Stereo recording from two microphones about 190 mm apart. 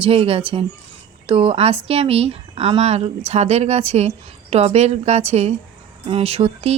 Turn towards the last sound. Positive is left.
turn(degrees=-30)  # may be behind; listen again after turning